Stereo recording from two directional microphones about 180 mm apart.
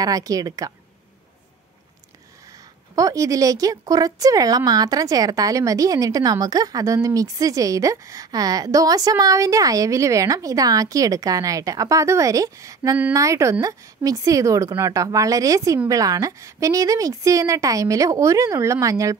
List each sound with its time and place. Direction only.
0.0 s a woman's voice: 20° right (ahead or behind)
3.0 s a woman's voice: 20° right (ahead or behind)